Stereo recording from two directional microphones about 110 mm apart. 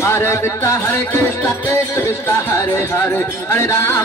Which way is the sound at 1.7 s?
25° left (ahead or behind).